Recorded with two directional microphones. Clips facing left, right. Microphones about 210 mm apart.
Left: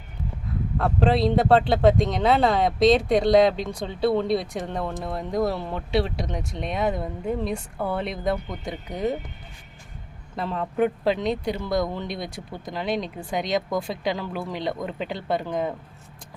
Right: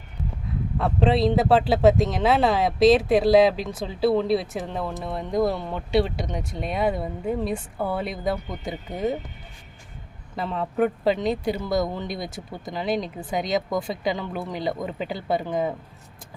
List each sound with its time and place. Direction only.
0.8 s speech: centre (ahead or behind)
10.3 s speech: centre (ahead or behind)